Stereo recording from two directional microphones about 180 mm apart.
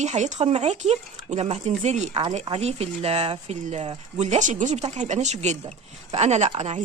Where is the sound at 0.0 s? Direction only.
40° right (ahead or behind).